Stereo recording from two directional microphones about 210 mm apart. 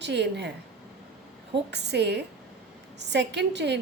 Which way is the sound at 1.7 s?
55° right (ahead or behind).